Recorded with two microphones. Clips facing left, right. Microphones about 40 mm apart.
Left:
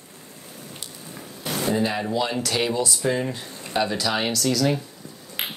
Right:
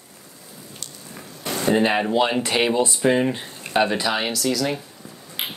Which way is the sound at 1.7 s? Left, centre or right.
Right.